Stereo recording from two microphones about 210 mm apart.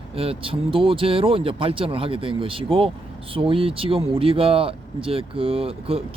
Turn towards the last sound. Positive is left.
turn(degrees=-25)  # may be behind; listen again after turning